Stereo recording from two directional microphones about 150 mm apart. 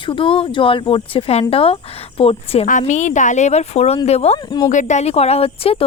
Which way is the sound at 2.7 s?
55° left (ahead or behind).